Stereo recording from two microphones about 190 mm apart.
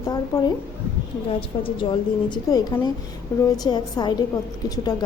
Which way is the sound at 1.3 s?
25° left (ahead or behind).